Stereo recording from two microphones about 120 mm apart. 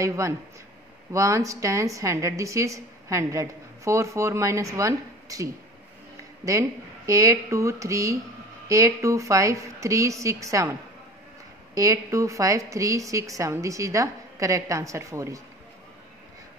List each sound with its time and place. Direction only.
0.0 s a woman's voice: 25° right (ahead or behind)
7.1 s a woman's voice: 25° right (ahead or behind)